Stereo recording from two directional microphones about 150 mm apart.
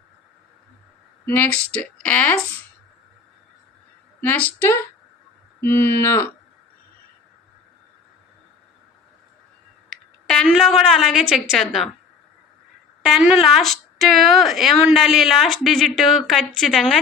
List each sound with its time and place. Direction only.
1.2 s speech: 15° left (ahead or behind)
4.2 s speech: 15° left (ahead or behind)
10.2 s speech: centre (ahead or behind)
13.1 s speech: centre (ahead or behind)